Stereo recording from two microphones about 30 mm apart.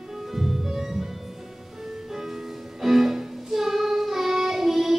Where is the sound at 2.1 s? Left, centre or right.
Centre.